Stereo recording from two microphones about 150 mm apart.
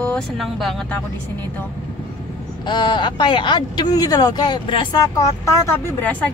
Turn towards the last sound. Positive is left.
turn(degrees=10)  # may be behind; listen again after turning